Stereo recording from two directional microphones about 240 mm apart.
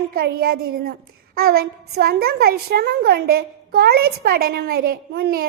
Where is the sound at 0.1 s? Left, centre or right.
Right.